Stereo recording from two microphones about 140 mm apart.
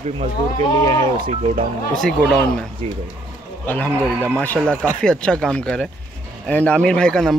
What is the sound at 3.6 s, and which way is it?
Speech, 10° left (ahead or behind).